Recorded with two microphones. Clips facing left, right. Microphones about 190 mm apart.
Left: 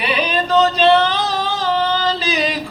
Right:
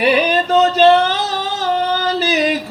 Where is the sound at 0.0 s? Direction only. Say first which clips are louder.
Right 5 dB; 50° right (ahead or behind).